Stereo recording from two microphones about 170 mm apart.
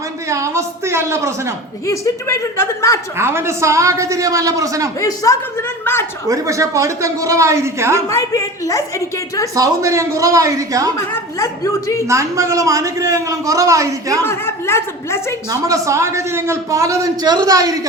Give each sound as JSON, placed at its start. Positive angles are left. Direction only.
{"t": 0.3, "sound": "a sound", "side_deg": -15}
{"t": 1.9, "sound": "speech", "side_deg": 15}
{"t": 3.2, "sound": "a man's voice", "side_deg": -15}
{"t": 4.9, "sound": "speech", "side_deg": 20}
{"t": 6.2, "sound": "speech", "side_deg": -20}
{"t": 8.1, "sound": "a woman's voice", "side_deg": 20}
{"t": 9.6, "sound": "a man's voice", "side_deg": -15}
{"t": 10.9, "sound": "speech", "side_deg": 15}
{"t": 12.0, "sound": "a man's voice", "side_deg": -20}
{"t": 14.3, "sound": "speech", "side_deg": 15}
{"t": 15.4, "sound": "a man's voice", "side_deg": -20}